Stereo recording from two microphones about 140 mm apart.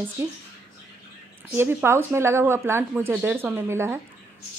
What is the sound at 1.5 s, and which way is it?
A woman's voice, 15° right (ahead or behind).